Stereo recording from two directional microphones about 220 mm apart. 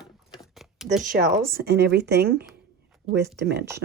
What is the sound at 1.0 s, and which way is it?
Speech, 40° right (ahead or behind).